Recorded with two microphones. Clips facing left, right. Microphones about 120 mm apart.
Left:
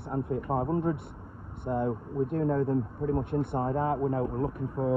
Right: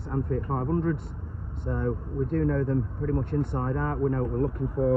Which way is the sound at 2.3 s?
20° left (ahead or behind).